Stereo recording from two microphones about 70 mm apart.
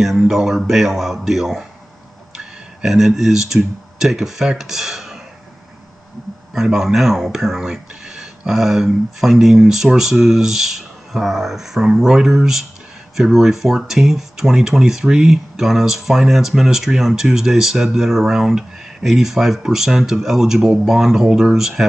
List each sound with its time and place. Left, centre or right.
0.0 s speech: centre
6.5 s speech: centre